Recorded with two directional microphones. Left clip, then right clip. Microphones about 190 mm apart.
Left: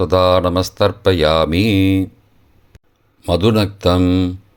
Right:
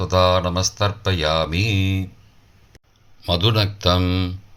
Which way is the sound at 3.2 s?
45° left (ahead or behind).